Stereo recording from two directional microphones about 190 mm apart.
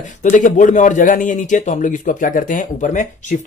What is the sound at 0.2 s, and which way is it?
A man's voice, 40° left (ahead or behind).